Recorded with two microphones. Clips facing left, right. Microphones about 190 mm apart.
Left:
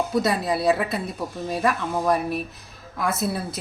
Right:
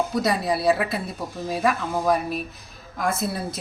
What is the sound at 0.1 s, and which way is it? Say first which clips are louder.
A woman's voice: left 1 dB; centre (ahead or behind).